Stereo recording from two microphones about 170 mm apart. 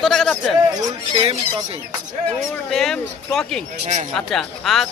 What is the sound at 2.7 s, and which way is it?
Speech, centre (ahead or behind).